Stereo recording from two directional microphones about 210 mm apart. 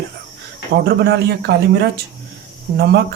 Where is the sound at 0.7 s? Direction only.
50° right (ahead or behind).